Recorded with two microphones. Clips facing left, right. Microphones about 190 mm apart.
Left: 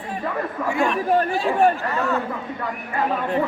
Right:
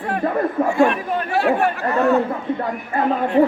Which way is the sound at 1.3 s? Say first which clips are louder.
Right 1 dB; 65° right (ahead or behind).